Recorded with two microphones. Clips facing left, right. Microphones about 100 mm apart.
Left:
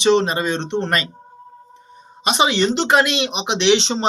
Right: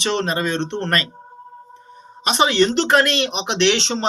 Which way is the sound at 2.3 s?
10° left (ahead or behind).